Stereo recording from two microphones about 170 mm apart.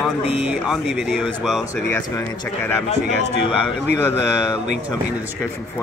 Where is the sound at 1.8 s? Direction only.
10° left (ahead or behind).